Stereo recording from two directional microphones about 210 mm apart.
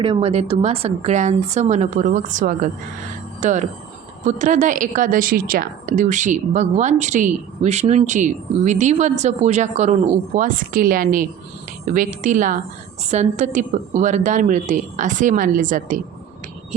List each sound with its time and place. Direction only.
0.0 s a woman's voice: 25° right (ahead or behind)